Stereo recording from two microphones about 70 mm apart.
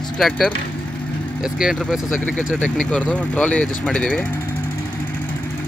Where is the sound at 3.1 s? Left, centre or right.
Centre.